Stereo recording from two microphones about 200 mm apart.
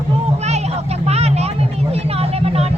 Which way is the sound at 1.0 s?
30° right (ahead or behind).